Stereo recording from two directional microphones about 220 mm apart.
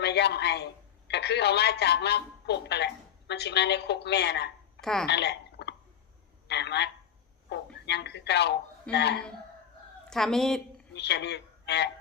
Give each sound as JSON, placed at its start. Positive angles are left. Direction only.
{"t": 0.0, "sound": "a man's voice", "side_deg": 50}
{"t": 4.8, "sound": "speech", "side_deg": 0}
{"t": 5.0, "sound": "a man's voice", "side_deg": 50}
{"t": 10.1, "sound": "a woman's voice", "side_deg": 0}
{"t": 10.9, "sound": "speech", "side_deg": 50}